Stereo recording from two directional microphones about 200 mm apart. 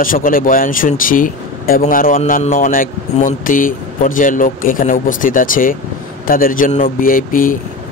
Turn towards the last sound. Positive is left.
turn(degrees=45)  # may be behind; listen again after turning